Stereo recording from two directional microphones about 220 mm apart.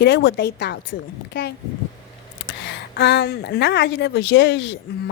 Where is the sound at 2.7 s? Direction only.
50° left (ahead or behind).